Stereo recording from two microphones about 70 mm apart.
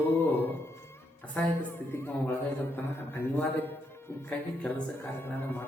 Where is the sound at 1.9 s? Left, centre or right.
Left.